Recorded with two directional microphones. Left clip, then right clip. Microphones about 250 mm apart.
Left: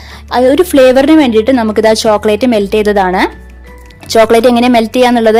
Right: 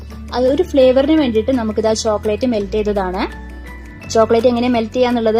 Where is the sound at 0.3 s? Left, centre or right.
Left.